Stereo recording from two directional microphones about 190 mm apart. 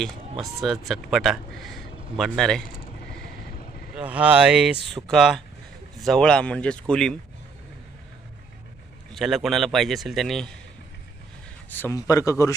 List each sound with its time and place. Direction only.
0.0 s a man's voice: centre (ahead or behind)
3.9 s a man's voice: 5° right (ahead or behind)
9.1 s a man's voice: centre (ahead or behind)
11.7 s speech: 15° left (ahead or behind)